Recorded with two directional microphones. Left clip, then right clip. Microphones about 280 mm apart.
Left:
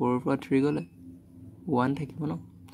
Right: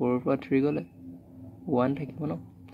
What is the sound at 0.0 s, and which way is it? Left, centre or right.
Speech, left.